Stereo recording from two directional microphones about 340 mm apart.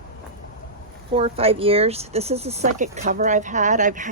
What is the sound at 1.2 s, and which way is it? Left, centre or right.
Speech, centre.